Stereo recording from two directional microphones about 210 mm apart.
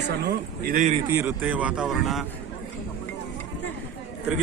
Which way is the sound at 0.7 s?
35° right (ahead or behind).